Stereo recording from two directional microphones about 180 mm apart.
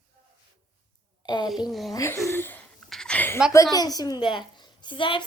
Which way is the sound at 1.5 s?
Centre (ahead or behind).